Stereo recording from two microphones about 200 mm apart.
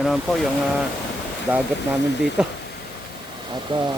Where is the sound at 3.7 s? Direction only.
25° right (ahead or behind).